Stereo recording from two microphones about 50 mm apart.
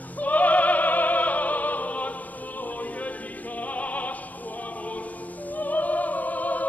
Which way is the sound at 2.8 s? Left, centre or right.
Left.